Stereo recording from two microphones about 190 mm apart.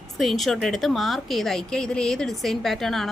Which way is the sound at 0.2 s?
Centre (ahead or behind).